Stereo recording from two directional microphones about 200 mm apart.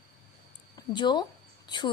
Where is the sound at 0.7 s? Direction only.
20° left (ahead or behind).